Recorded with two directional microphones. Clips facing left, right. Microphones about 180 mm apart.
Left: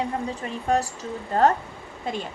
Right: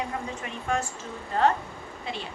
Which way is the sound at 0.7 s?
35° left (ahead or behind).